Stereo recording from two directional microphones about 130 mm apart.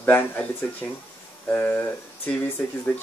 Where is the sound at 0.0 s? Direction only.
15° left (ahead or behind).